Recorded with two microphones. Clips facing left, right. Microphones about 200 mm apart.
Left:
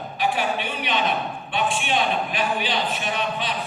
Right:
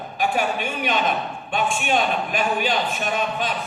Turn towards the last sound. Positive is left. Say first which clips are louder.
# right 2 dB
turn(degrees=-45)  # may be behind; listen again after turning